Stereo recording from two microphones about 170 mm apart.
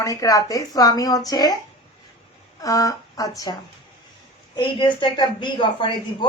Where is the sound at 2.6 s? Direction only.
20° left (ahead or behind).